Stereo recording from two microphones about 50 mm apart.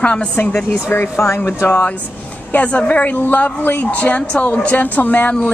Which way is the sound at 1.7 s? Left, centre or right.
Left.